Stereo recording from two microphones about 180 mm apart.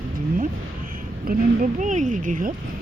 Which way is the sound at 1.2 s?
45° right (ahead or behind).